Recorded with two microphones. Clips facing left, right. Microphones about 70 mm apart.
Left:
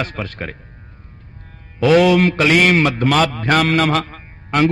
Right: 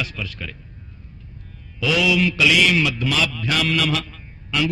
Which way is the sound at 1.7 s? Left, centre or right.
Left.